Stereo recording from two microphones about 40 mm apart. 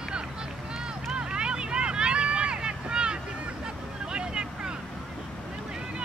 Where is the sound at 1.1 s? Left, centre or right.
Right.